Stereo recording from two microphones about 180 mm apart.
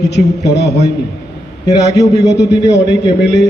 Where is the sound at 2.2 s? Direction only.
75° left (ahead or behind).